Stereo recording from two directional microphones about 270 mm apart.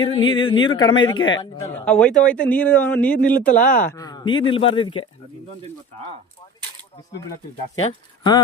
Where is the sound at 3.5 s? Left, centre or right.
Left.